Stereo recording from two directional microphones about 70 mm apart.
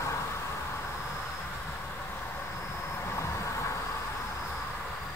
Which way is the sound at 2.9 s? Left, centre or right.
Left.